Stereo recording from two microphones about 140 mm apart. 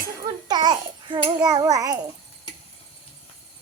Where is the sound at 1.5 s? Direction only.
25° right (ahead or behind).